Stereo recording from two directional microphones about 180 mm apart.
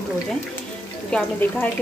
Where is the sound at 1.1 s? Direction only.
5° left (ahead or behind).